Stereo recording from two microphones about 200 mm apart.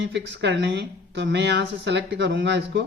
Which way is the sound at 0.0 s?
60° right (ahead or behind).